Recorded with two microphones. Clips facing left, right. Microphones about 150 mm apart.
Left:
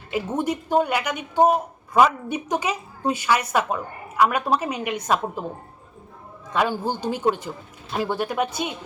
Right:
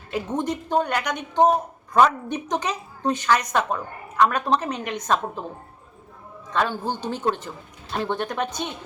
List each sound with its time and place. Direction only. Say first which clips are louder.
0.1 s speech: left 1 dB; 10° left (ahead or behind)
6.5 s speech: left 2 dB; 10° left (ahead or behind)